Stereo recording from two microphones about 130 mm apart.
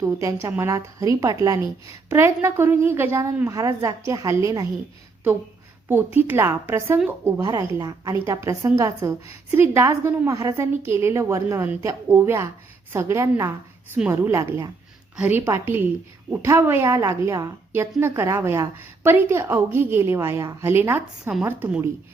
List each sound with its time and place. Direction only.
0.0 s a woman's voice: 25° right (ahead or behind)
5.9 s a woman's voice: 15° right (ahead or behind)